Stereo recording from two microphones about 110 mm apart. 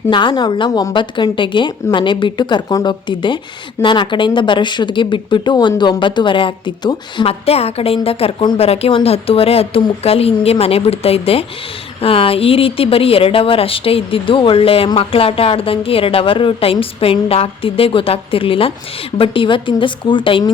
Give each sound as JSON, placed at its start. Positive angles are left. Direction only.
{"t": 0.1, "sound": "speech", "side_deg": 45}
{"t": 7.4, "sound": "speech", "side_deg": 65}